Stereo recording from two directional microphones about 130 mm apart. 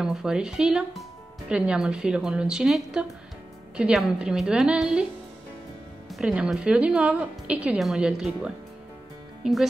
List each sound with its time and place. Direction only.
0.0 s a woman's voice: 5° right (ahead or behind)
6.0 s speech: centre (ahead or behind)